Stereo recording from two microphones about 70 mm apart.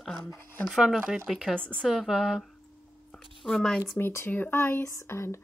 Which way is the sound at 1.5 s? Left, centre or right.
Centre.